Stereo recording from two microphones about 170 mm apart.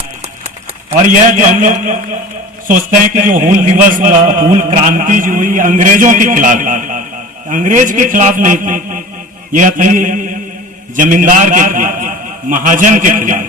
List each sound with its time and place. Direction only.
0.9 s a man's voice: 50° right (ahead or behind)